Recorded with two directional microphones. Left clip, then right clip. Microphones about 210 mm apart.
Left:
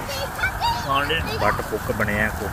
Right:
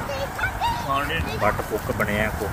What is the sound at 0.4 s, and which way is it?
Honk, 60° left (ahead or behind).